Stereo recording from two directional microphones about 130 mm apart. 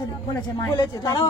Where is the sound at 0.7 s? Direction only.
30° left (ahead or behind).